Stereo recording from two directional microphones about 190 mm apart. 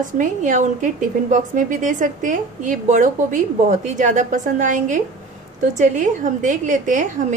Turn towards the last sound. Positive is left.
turn(degrees=-40)  # may be behind; listen again after turning